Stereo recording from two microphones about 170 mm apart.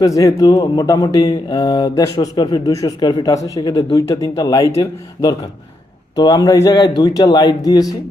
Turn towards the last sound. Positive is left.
turn(degrees=20)  # may be behind; listen again after turning